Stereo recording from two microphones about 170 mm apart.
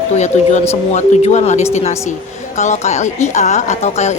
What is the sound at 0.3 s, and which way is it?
A woman's voice, 40° left (ahead or behind).